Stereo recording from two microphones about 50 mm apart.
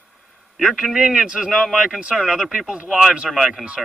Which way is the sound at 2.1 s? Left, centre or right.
Centre.